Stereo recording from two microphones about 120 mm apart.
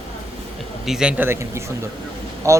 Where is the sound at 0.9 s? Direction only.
5° right (ahead or behind); by 2.6 s 25° right (ahead or behind).